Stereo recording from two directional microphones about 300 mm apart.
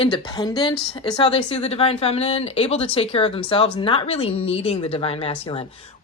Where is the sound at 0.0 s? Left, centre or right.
Centre.